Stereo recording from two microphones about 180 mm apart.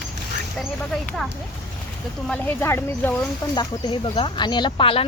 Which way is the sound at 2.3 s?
10° left (ahead or behind).